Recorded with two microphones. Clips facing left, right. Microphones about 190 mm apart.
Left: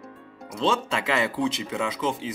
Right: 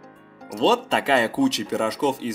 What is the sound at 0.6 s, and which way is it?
Speech, 35° right (ahead or behind).